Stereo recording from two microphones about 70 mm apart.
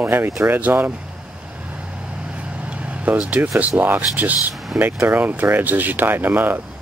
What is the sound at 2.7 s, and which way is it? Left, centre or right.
Vehicle, centre.